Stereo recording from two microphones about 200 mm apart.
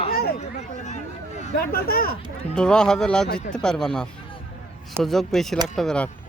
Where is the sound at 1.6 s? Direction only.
50° left (ahead or behind).